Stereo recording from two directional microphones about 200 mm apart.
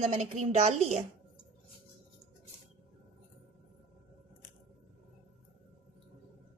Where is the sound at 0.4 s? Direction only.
35° right (ahead or behind).